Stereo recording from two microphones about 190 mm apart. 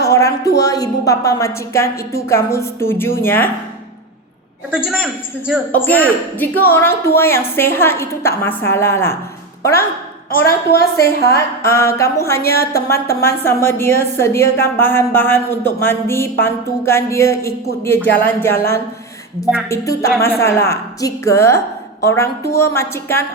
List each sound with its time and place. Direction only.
0.1 s a sound: 15° left (ahead or behind)
0.6 s a woman's voice: 20° left (ahead or behind)
4.9 s a man's voice: 5° right (ahead or behind)
5.7 s a woman's voice: 10° left (ahead or behind)
10.4 s a woman's voice: 55° left (ahead or behind)
11.3 s a woman's voice: 15° left (ahead or behind)
19.6 s a woman's voice: 15° left (ahead or behind)